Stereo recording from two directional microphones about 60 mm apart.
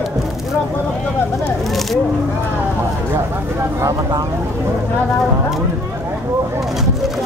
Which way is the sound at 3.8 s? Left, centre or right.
Right.